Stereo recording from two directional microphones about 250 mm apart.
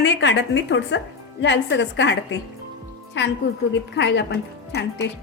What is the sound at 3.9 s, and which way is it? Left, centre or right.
A woman's voice, left.